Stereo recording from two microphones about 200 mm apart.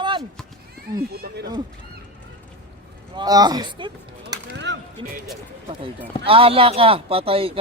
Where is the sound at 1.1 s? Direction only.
50° right (ahead or behind).